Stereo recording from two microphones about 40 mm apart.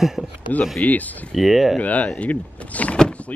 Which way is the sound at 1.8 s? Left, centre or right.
Left.